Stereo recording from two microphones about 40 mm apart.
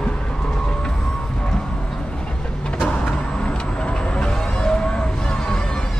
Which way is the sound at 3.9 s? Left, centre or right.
Left.